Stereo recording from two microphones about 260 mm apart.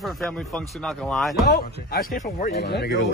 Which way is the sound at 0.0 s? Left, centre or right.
Centre.